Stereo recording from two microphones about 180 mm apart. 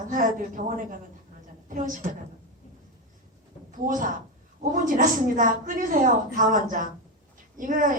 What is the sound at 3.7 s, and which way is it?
A woman's voice, 50° right (ahead or behind).